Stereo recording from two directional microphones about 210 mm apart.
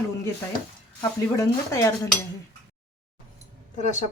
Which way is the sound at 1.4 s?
15° left (ahead or behind).